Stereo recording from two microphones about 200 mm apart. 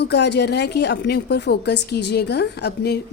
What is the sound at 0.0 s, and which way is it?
A woman's voice, 55° left (ahead or behind).